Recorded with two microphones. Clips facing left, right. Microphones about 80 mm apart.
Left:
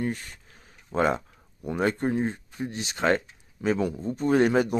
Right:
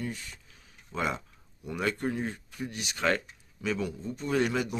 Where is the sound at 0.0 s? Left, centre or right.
Left.